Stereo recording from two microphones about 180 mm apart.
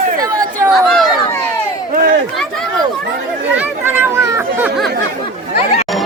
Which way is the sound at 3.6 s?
10° right (ahead or behind).